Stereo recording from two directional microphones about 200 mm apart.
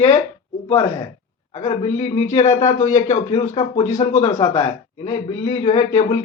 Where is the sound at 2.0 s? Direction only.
30° left (ahead or behind).